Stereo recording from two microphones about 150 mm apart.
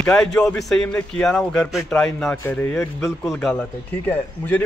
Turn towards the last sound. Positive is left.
turn(degrees=10)  # may be behind; listen again after turning